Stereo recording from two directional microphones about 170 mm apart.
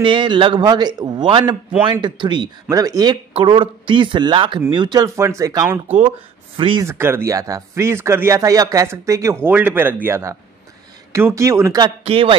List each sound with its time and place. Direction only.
0.0 s speech: 30° right (ahead or behind)
6.9 s speech: 15° right (ahead or behind)
12.0 s speech: 35° right (ahead or behind)